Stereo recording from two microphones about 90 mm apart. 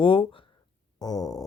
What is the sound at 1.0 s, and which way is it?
Speech, 45° left (ahead or behind).